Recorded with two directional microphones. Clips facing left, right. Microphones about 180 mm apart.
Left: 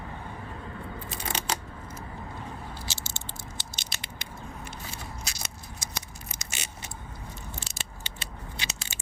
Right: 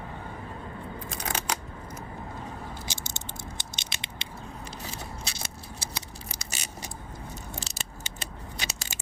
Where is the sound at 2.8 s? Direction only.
15° right (ahead or behind).